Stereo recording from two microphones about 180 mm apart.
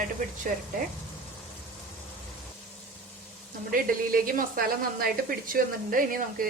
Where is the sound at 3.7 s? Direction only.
50° right (ahead or behind).